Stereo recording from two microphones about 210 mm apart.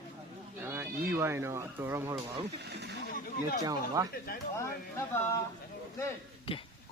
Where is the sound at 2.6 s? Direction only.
55° right (ahead or behind).